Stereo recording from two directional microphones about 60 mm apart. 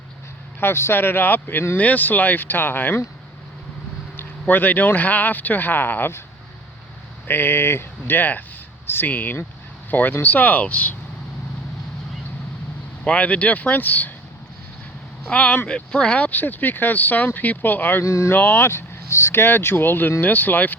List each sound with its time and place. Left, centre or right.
0.6 s speech: left
4.2 s speech: left
7.3 s speech: left
13.1 s speech: left
15.3 s speech: left
18.0 s speech: left
18.3 s speech: left